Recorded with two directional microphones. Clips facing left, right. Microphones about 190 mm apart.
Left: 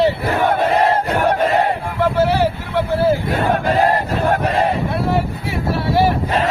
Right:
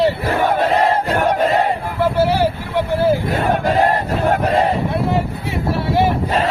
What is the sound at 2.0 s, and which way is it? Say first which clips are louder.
Vehicle: even; 10° right (ahead or behind).